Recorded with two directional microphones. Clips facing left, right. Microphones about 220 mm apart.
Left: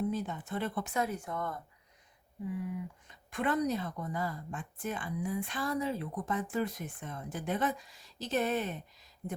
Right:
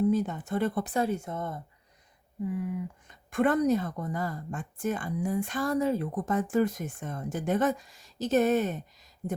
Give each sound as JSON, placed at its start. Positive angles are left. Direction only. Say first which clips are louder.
{"t": 0.1, "sound": "speech", "louder": "right 8 dB", "side_deg": -45}
{"t": 2.6, "sound": "speech", "louder": "right 5 dB", "side_deg": -50}